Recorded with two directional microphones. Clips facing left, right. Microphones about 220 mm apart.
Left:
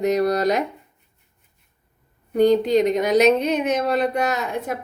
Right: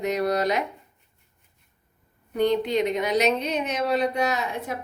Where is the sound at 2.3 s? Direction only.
40° left (ahead or behind).